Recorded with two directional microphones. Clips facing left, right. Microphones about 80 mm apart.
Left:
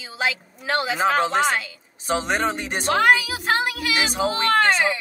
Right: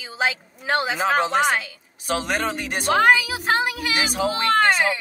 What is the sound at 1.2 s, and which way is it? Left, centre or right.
Speech, centre.